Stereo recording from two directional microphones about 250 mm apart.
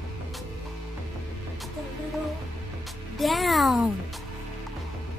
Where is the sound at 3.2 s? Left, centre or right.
Centre.